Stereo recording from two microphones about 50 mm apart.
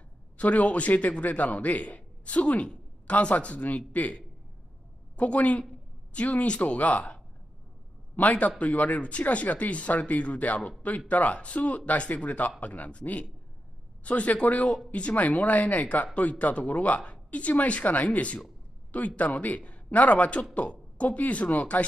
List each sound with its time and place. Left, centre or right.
0.4 s a man's voice: left
8.2 s a man's voice: left